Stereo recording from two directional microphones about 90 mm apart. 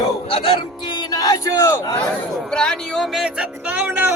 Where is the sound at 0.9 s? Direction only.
45° left (ahead or behind).